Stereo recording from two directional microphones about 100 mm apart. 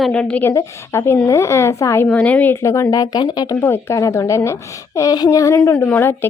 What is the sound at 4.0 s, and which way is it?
A woman's voice, 30° left (ahead or behind).